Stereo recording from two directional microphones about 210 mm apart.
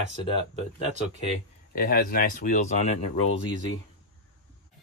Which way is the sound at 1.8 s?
45° left (ahead or behind).